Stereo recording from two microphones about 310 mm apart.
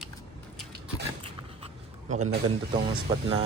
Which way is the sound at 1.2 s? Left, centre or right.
Right.